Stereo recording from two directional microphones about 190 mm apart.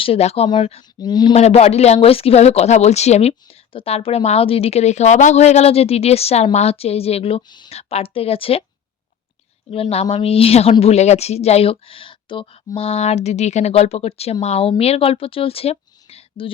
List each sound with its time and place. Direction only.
0.0 s speech: 30° left (ahead or behind)
9.6 s speech: 30° left (ahead or behind)